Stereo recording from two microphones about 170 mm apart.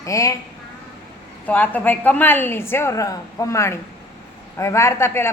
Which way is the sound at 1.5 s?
10° left (ahead or behind).